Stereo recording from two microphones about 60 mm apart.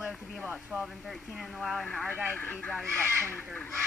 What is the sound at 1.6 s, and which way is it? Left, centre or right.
Speech, centre.